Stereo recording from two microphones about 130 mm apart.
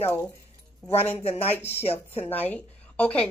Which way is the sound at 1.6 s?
15° left (ahead or behind).